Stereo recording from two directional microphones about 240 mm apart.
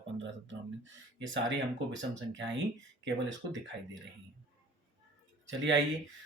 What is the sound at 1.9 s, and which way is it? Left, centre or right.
Speech, right.